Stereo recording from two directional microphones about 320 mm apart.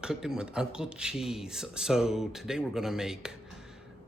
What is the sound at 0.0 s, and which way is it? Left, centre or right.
Speech, centre.